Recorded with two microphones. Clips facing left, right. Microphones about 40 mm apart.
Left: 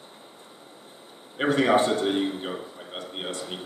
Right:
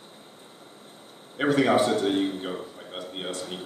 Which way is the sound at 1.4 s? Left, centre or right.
Left.